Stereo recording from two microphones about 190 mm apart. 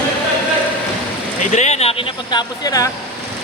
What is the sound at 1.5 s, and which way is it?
Speech, 35° left (ahead or behind).